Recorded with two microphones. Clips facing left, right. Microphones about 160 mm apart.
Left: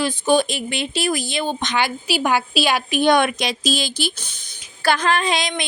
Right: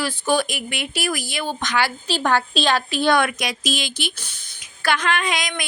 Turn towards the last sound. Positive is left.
turn(degrees=30)  # may be behind; listen again after turning